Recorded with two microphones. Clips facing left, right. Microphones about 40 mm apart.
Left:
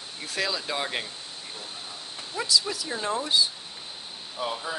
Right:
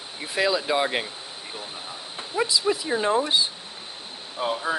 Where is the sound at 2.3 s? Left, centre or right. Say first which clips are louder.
Right 4 dB; right.